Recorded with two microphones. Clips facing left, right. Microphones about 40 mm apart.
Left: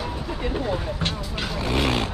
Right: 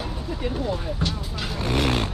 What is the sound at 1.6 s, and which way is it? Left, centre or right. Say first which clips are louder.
Speech: even; left.